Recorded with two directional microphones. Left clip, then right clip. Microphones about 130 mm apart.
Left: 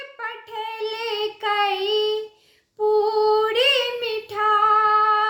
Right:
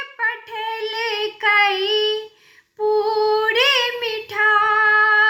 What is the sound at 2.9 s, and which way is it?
Female singing, 45° left (ahead or behind).